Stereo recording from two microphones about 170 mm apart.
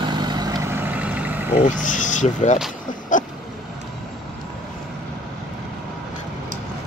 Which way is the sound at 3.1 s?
50° left (ahead or behind).